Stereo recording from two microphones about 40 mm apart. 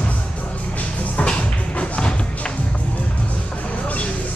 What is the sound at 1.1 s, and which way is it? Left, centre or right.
Music, left.